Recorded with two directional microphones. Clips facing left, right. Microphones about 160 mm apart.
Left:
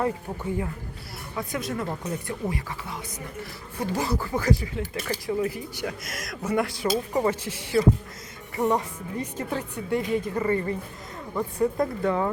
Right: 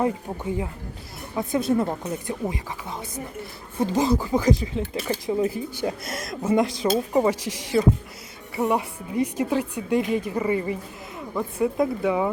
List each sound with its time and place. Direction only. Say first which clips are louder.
1.4 s a woman's voice: right 8 dB; 25° right (ahead or behind); by 12.3 s 10° right (ahead or behind)